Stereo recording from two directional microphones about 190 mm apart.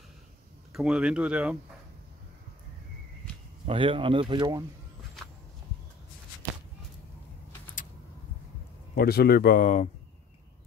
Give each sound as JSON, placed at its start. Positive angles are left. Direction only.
{"t": 0.7, "sound": "speech", "side_deg": -5}
{"t": 3.6, "sound": "speech", "side_deg": -25}
{"t": 8.9, "sound": "speech", "side_deg": 55}